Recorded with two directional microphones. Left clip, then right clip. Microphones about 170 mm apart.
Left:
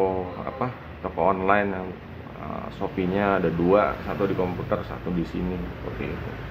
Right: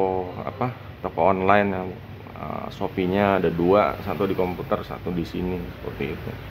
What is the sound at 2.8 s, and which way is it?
Speech, 35° right (ahead or behind).